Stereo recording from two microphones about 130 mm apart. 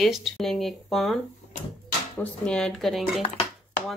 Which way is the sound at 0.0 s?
Centre (ahead or behind).